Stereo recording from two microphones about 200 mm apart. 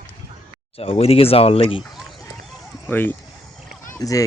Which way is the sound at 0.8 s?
30° left (ahead or behind).